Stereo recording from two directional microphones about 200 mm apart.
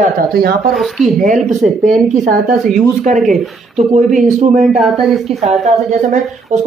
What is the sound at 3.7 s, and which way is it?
Speech, 40° right (ahead or behind).